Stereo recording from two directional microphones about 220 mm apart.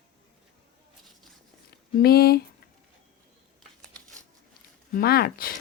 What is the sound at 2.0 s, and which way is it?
Speech, 45° left (ahead or behind).